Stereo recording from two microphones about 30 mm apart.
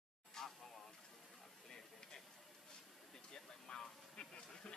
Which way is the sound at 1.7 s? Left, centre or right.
Left.